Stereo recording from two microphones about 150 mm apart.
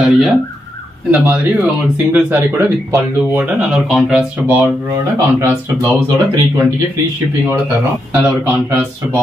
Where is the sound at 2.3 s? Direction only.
20° right (ahead or behind).